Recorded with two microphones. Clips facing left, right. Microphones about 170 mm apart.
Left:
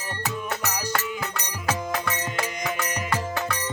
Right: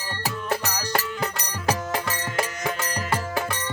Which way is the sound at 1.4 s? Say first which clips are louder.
Right 1 dB; 35° right (ahead or behind).